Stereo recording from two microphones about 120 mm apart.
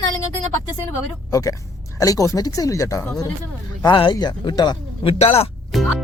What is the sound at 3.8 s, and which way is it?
Speech, 40° left (ahead or behind).